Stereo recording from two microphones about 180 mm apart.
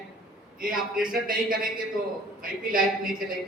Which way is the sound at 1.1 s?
50° right (ahead or behind).